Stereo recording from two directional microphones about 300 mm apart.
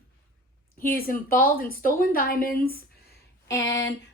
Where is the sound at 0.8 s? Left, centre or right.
Left.